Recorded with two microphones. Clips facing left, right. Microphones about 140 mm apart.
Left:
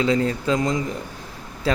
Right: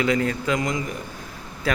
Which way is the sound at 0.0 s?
25° left (ahead or behind).